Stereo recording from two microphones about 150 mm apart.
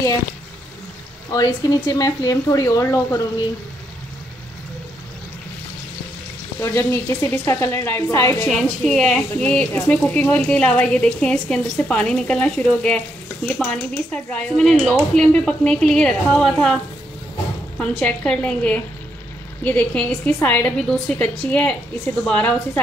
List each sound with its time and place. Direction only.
1.3 s speech: 25° left (ahead or behind)
6.6 s speech: 20° left (ahead or behind)
8.5 s speech: 5° left (ahead or behind)
17.7 s speech: 5° left (ahead or behind)